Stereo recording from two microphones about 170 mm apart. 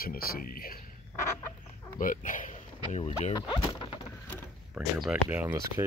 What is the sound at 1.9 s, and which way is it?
Speech, 50° left (ahead or behind).